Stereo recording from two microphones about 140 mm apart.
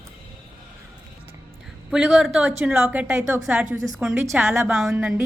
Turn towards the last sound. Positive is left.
turn(degrees=-5)  # may be behind; listen again after turning